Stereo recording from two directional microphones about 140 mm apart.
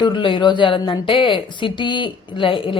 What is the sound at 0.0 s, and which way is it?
A woman's voice, 35° left (ahead or behind).